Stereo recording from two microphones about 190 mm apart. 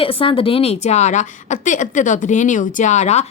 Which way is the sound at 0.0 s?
30° left (ahead or behind).